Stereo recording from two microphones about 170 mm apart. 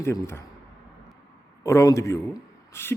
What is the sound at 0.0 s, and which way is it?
Speech, 15° left (ahead or behind).